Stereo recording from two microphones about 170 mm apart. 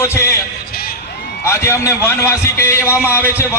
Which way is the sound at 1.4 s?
15° left (ahead or behind).